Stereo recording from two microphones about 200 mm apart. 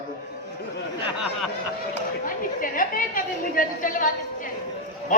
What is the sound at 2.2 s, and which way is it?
A man's voice, 45° left (ahead or behind).